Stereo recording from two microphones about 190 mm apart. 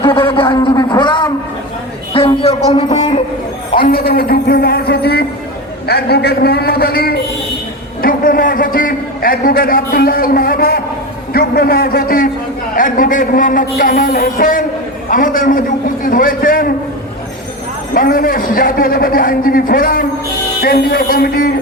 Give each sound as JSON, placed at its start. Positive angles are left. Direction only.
{"t": 0.4, "sound": "a sound", "side_deg": 25}
{"t": 3.8, "sound": "a man's voice", "side_deg": 50}
{"t": 17.9, "sound": "a man's voice", "side_deg": 50}